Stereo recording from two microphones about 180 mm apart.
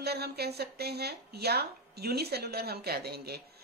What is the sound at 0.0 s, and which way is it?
A woman's voice, 65° right (ahead or behind).